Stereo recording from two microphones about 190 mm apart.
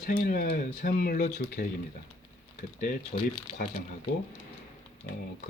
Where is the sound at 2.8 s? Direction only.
50° left (ahead or behind).